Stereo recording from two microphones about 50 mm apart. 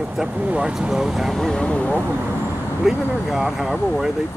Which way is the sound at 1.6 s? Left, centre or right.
Left.